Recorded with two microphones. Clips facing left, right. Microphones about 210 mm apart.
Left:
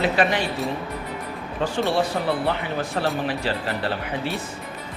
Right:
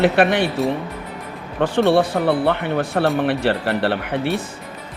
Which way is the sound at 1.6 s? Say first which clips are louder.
Right 7 dB; 65° right (ahead or behind).